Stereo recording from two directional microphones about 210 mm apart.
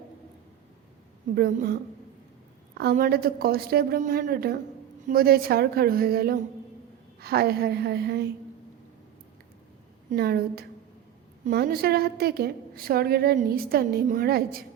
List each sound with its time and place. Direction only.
1.4 s a woman's voice: 50° right (ahead or behind)
10.1 s a woman's voice: 50° right (ahead or behind)